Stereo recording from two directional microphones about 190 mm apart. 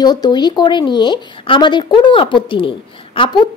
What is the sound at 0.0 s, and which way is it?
Speech, 20° left (ahead or behind).